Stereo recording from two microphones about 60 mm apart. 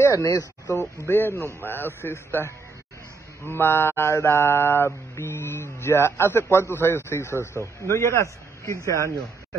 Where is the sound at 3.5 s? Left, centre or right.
Left.